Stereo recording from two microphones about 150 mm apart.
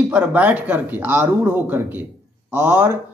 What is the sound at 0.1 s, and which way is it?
Speech, 10° right (ahead or behind).